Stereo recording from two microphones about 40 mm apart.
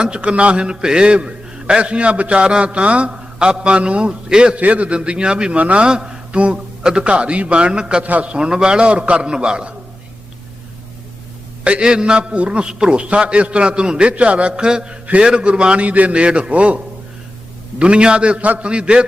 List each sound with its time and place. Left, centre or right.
0.0 s a man's voice: right
4.5 s a man's voice: right
5.5 s a man's voice: right
5.8 s a man's voice: centre
8.0 s a man's voice: right
11.8 s a man's voice: right